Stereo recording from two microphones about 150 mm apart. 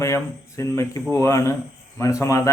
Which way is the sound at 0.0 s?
20° left (ahead or behind).